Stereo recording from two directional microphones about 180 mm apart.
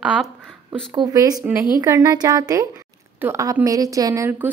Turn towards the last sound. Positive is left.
turn(degrees=-10)  # may be behind; listen again after turning